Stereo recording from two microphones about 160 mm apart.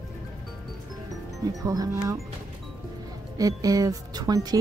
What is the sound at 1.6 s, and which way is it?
Speech, 20° right (ahead or behind).